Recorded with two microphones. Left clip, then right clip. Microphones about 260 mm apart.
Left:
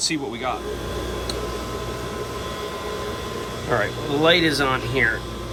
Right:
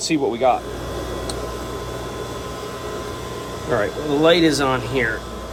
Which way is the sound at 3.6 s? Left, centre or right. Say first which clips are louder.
Right 2 dB; centre.